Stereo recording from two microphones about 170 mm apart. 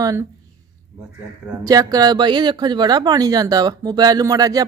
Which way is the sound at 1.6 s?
20° right (ahead or behind).